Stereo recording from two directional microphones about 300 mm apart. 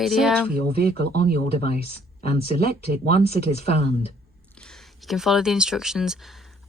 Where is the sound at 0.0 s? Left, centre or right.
Centre.